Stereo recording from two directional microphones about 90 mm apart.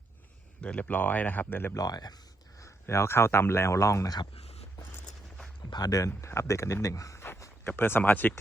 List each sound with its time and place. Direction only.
0.6 s speech: 15° left (ahead or behind)
1.7 s speech: 45° left (ahead or behind)
2.6 s speech: 35° left (ahead or behind)
5.7 s speech: 45° left (ahead or behind); by 8.4 s 20° left (ahead or behind)